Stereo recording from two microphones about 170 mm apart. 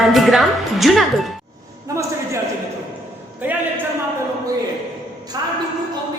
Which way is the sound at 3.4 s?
10° right (ahead or behind).